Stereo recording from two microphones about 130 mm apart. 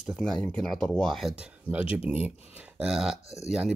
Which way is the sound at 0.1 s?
5° left (ahead or behind).